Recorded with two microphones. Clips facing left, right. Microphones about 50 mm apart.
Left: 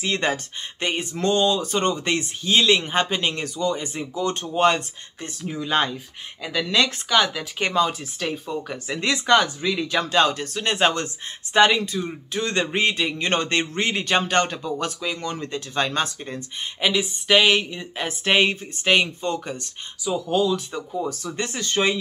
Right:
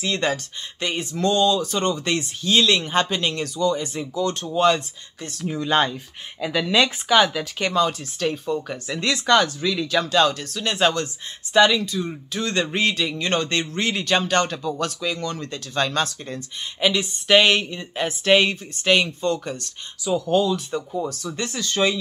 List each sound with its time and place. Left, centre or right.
0.0 s speech: left
5.5 s a woman's voice: centre
7.7 s speech: centre
16.8 s a woman's voice: centre
18.0 s speech: left
20.1 s a woman's voice: centre
21.1 s speech: left